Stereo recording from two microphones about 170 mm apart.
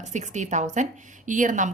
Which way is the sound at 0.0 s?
45° right (ahead or behind).